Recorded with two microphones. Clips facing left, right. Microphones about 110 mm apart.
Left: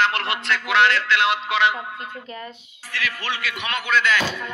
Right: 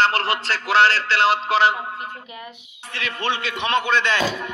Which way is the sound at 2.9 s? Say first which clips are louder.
Right 3 dB; 30° right (ahead or behind).